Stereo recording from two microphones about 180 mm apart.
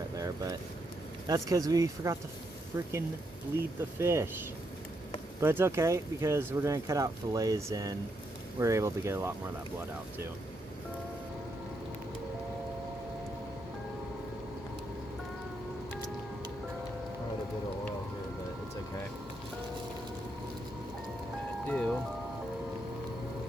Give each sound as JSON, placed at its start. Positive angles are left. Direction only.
{"t": 0.2, "sound": "vehicle", "side_deg": -20}
{"t": 1.3, "sound": "speech", "side_deg": -20}
{"t": 5.4, "sound": "speech", "side_deg": -15}
{"t": 21.7, "sound": "music", "side_deg": 5}